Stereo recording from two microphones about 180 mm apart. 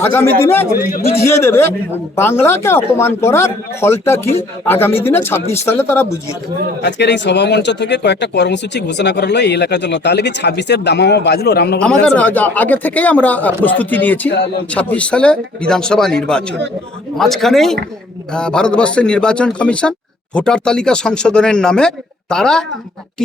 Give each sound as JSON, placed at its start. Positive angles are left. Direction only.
{"t": 0.0, "sound": "speech", "side_deg": 10}
{"t": 6.8, "sound": "speech", "side_deg": 70}
{"t": 11.8, "sound": "speech", "side_deg": 5}
{"t": 14.3, "sound": "speech", "side_deg": 75}
{"t": 14.7, "sound": "speech", "side_deg": 5}